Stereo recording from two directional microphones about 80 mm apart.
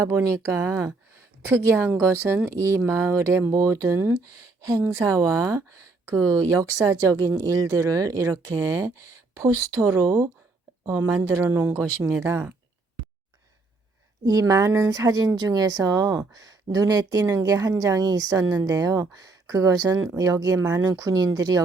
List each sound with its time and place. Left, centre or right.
0.0 s speech: right
1.8 s speech: right
4.8 s speech: right
5.0 s speech: right
11.3 s speech: right
12.2 s speech: right
14.3 s speech: right